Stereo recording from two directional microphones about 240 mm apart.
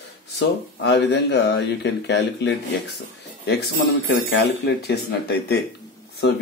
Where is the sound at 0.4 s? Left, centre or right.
Left.